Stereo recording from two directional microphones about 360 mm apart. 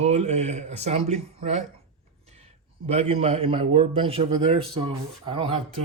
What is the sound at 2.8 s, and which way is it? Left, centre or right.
A man's voice, centre.